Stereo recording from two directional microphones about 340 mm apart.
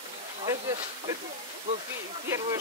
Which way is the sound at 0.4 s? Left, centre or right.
Centre.